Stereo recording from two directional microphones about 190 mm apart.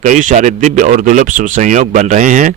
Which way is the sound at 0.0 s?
40° right (ahead or behind).